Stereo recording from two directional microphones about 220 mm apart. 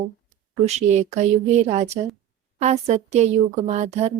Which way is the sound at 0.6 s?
30° right (ahead or behind).